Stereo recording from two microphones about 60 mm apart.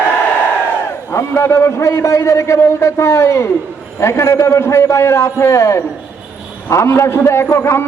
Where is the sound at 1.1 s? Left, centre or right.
Left.